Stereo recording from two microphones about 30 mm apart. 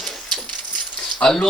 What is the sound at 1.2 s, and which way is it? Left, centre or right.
Speech, left.